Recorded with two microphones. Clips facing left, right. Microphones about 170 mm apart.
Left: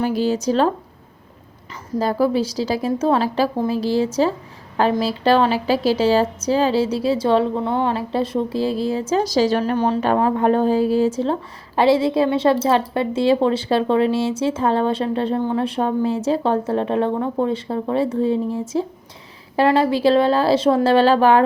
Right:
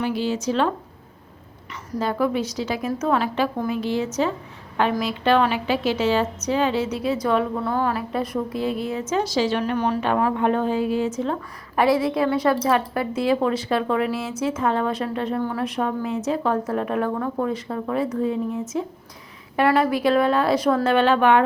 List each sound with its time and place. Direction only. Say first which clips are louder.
0.0 s a woman's voice: left 4 dB; 40° left (ahead or behind)
2.0 s a woman's voice: left 4 dB; 35° left (ahead or behind)